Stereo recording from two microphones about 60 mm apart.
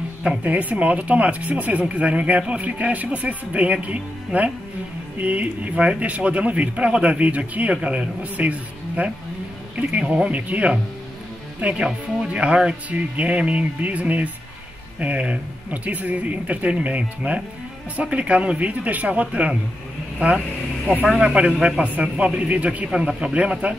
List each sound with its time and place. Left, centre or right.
0.4 s speech: right
21.2 s speech: centre
22.8 s speech: centre